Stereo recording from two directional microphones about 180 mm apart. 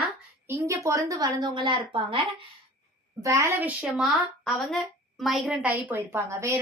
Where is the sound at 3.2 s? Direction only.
15° right (ahead or behind).